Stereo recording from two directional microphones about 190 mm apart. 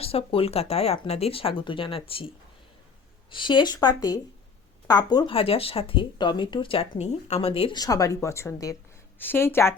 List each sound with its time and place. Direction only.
0.0 s speech: 30° left (ahead or behind)
3.3 s speech: 25° left (ahead or behind)